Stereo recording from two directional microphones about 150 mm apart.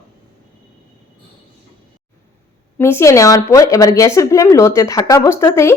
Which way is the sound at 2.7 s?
15° left (ahead or behind).